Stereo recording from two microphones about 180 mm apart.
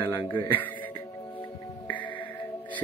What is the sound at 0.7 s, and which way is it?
Music, 25° left (ahead or behind).